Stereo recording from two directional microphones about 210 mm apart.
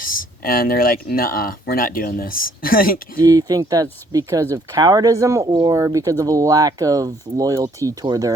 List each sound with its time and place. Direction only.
0.0 s speech: 40° left (ahead or behind)
3.2 s speech: 15° right (ahead or behind)